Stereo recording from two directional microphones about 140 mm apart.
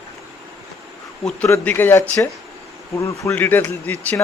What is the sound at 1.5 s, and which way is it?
A man's voice, 15° left (ahead or behind).